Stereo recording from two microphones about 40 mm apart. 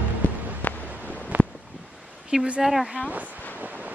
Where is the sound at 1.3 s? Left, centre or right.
Right.